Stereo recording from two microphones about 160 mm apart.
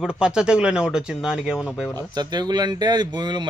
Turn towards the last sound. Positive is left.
turn(degrees=-25)  # may be behind; listen again after turning